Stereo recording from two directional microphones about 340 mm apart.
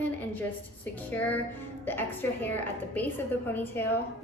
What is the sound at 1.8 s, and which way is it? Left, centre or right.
A woman's voice, centre.